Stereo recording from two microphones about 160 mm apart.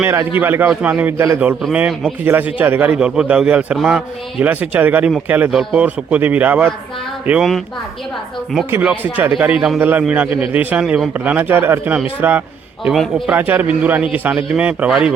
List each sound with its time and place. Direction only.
0.0 s a man's voice: 15° right (ahead or behind)
8.7 s a man's voice: 5° right (ahead or behind)
12.8 s a man's voice: centre (ahead or behind)
13.3 s a man's voice: 10° right (ahead or behind)